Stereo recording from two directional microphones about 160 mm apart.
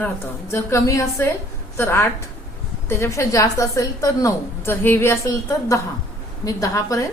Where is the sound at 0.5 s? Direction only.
20° left (ahead or behind).